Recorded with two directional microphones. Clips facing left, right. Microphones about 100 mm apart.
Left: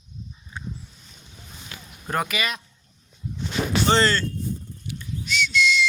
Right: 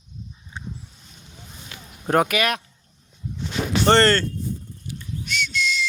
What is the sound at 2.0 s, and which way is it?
Speech, 60° right (ahead or behind).